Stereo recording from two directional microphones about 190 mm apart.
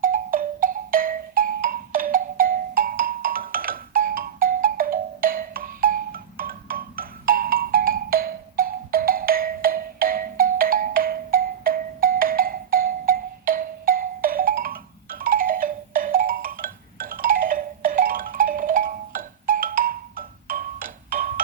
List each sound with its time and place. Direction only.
0.0 s music: 45° right (ahead or behind)